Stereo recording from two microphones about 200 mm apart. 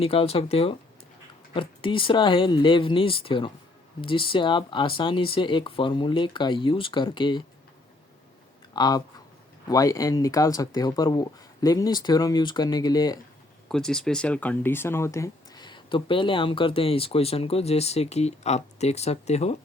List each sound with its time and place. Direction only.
0.0 s speech: 30° left (ahead or behind)
8.7 s speech: 20° left (ahead or behind)
13.7 s speech: 5° left (ahead or behind); by 19.5 s 30° left (ahead or behind)